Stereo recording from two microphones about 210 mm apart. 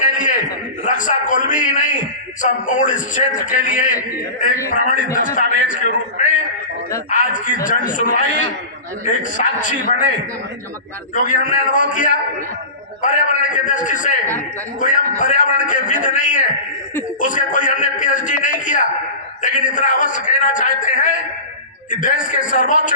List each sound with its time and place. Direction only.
0.1 s a sound: 40° left (ahead or behind)
0.9 s a man's voice: 40° left (ahead or behind)
11.1 s a man's voice: 40° left (ahead or behind)